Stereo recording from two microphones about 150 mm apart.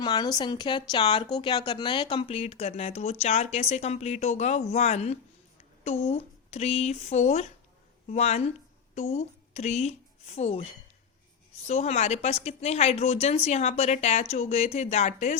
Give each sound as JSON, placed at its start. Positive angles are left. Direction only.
{"t": 0.0, "sound": "a woman's voice", "side_deg": 25}